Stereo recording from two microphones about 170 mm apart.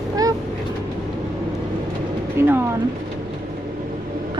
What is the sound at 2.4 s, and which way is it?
Speech, 15° right (ahead or behind).